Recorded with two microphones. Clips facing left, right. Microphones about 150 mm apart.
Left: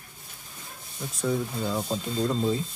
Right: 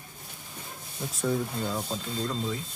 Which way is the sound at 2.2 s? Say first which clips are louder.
Left 7 dB; 20° left (ahead or behind).